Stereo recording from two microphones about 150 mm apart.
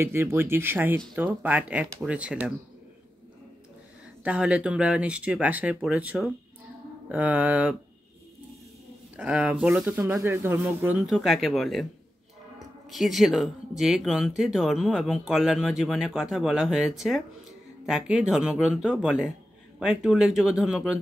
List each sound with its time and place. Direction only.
0.0 s speech: 15° right (ahead or behind)
4.2 s speech: 5° right (ahead or behind)
9.1 s speech: 10° right (ahead or behind)
11.1 s speech: centre (ahead or behind)
12.9 s speech: centre (ahead or behind)